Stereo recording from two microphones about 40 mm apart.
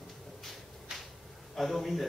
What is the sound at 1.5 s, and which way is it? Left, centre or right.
Speech, centre.